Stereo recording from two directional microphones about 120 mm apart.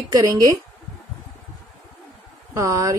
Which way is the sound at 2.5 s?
25° right (ahead or behind).